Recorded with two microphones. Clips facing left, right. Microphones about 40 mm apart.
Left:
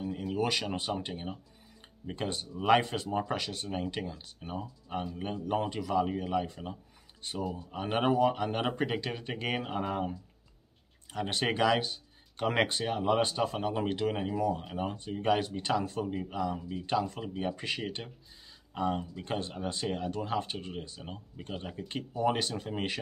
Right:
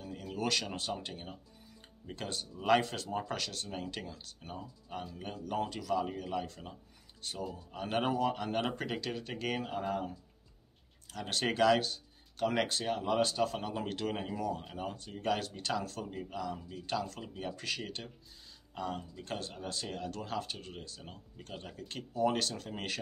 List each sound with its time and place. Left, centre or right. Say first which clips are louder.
0.0 s speech: left 5 dB; left
4.6 s speech: left 7 dB; left
12.4 s speech: left 3 dB; left
12.7 s speech: left 3 dB; centre
16.5 s speech: left 6 dB; left